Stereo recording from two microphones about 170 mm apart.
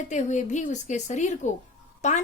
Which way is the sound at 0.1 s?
45° left (ahead or behind).